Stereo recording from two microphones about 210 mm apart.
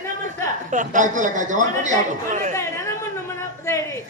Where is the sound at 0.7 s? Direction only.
35° right (ahead or behind).